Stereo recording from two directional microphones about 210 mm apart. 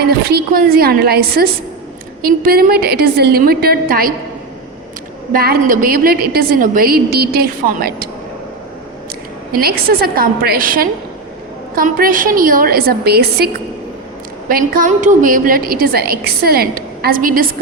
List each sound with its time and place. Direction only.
0.3 s a woman's voice: 45° right (ahead or behind)
5.3 s a woman's voice: 45° right (ahead or behind)
9.5 s a woman's voice: 45° right (ahead or behind)